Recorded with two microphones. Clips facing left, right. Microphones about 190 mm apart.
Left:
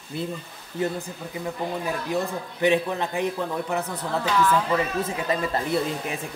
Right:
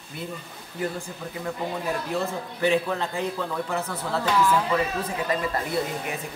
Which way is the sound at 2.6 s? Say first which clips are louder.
Left 1 dB; 20° left (ahead or behind).